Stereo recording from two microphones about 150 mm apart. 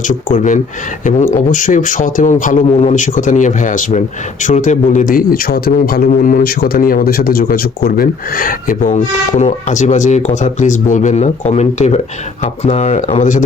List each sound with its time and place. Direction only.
0.1 s speech: 55° left (ahead or behind)
2.6 s a man's voice: 45° left (ahead or behind); by 6.0 s 90° left
6.1 s speech: 60° left (ahead or behind)